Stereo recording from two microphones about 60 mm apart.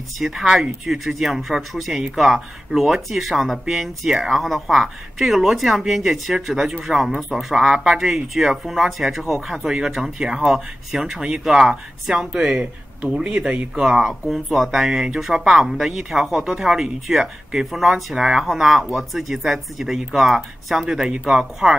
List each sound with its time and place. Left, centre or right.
0.2 s speech: centre; by 13.7 s right
13.7 s speech: centre